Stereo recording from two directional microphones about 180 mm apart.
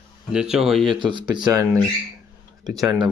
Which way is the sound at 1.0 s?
25° right (ahead or behind).